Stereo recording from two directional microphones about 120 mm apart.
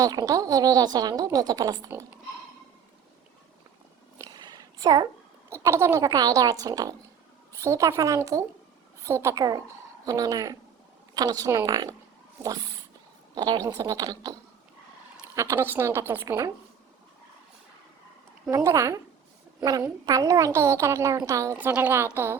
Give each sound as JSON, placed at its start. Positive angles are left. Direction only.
{"t": 0.0, "sound": "a woman's voice", "side_deg": -30}
{"t": 4.2, "sound": "a sound", "side_deg": -35}
{"t": 5.5, "sound": "a woman's voice", "side_deg": -25}
{"t": 15.4, "sound": "a woman's voice", "side_deg": -20}
{"t": 18.5, "sound": "a woman's voice", "side_deg": -25}
{"t": 20.1, "sound": "a woman's voice", "side_deg": -30}